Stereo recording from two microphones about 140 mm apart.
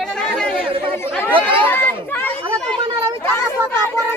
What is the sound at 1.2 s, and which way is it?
A child's voice, 15° left (ahead or behind).